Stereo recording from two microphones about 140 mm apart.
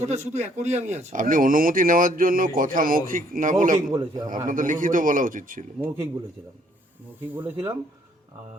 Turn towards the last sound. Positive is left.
turn(degrees=-15)  # may be behind; listen again after turning